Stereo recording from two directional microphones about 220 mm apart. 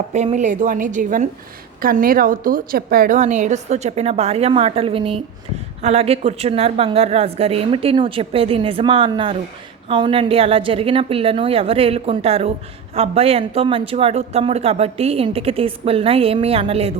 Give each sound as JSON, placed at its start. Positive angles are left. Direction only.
{"t": 0.1, "sound": "a woman's voice", "side_deg": -30}